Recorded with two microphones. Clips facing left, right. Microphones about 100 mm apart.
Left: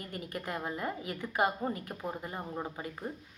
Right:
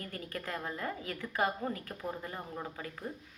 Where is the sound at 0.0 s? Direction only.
20° left (ahead or behind).